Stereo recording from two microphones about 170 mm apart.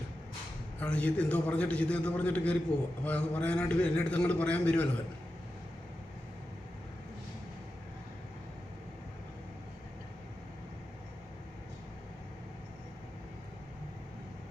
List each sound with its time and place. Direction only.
0.8 s a man's voice: 5° left (ahead or behind)